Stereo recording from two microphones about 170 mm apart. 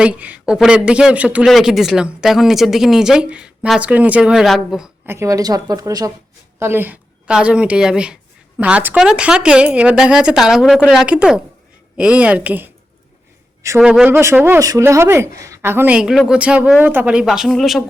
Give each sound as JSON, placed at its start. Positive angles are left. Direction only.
{"t": 0.0, "sound": "speech", "side_deg": -5}
{"t": 5.0, "sound": "a woman's voice", "side_deg": -15}
{"t": 13.7, "sound": "speech", "side_deg": -5}